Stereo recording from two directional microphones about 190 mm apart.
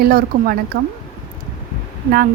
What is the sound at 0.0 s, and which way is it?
Speech, 50° right (ahead or behind).